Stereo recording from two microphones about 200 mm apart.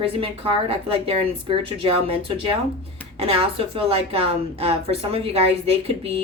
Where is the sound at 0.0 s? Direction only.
25° right (ahead or behind).